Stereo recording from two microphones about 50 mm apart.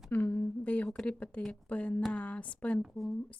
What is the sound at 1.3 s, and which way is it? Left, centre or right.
Speech, left.